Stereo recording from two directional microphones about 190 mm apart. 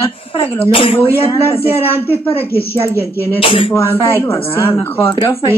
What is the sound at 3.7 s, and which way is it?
Speech, 15° left (ahead or behind).